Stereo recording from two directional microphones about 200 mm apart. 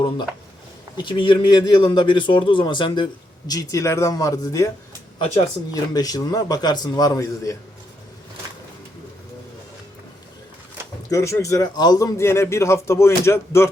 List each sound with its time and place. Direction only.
1.0 s speech: 25° left (ahead or behind)
5.7 s speech: 20° left (ahead or behind)
11.1 s speech: 15° left (ahead or behind)